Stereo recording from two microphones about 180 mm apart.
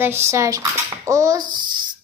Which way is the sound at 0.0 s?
15° right (ahead or behind).